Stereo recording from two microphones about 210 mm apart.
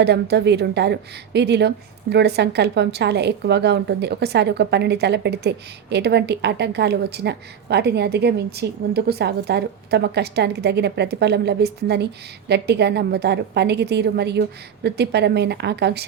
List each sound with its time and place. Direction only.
0.0 s a woman's voice: 50° right (ahead or behind)